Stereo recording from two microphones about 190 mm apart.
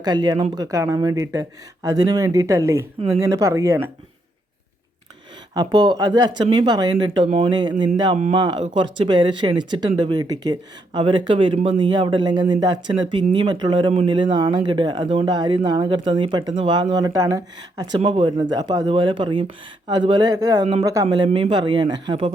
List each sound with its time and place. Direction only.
0.0 s speech: 20° right (ahead or behind)
5.5 s speech: 20° right (ahead or behind)